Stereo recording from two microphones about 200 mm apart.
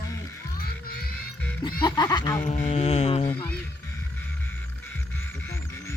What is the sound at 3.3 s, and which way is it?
Speech, 20° left (ahead or behind).